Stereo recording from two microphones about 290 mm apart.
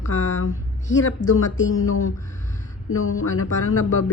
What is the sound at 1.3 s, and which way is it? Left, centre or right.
Speech, left.